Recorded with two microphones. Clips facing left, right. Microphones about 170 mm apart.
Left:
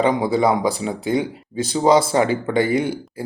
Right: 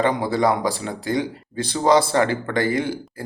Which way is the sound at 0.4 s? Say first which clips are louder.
Left 2 dB; 20° left (ahead or behind).